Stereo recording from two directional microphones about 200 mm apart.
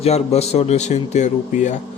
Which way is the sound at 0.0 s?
30° left (ahead or behind).